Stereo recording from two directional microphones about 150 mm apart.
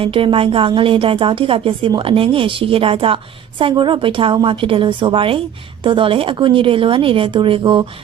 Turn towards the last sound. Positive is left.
turn(degrees=-30)  # may be behind; listen again after turning